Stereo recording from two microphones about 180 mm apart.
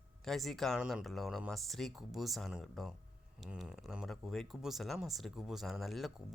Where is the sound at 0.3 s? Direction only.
Centre (ahead or behind).